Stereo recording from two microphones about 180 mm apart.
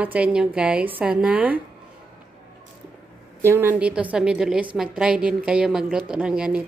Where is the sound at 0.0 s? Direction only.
5° right (ahead or behind).